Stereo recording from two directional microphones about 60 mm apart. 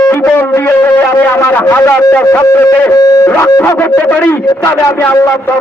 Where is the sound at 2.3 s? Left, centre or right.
Left.